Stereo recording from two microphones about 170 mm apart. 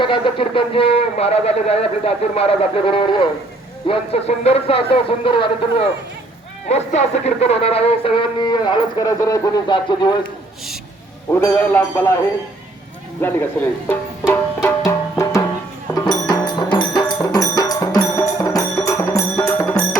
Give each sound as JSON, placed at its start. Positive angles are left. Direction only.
{"t": 0.0, "sound": "speech", "side_deg": 30}
{"t": 6.7, "sound": "speech", "side_deg": 40}
{"t": 11.3, "sound": "speech", "side_deg": 10}
{"t": 13.2, "sound": "speech", "side_deg": 15}
{"t": 14.8, "sound": "music", "side_deg": 15}